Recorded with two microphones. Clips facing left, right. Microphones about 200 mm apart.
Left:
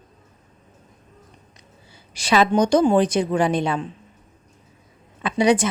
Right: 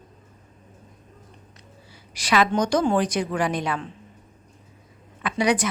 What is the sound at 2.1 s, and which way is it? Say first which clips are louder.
A woman's voice: left 3 dB; 25° left (ahead or behind).